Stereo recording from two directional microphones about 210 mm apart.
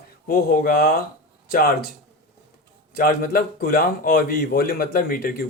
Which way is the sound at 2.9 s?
45° left (ahead or behind).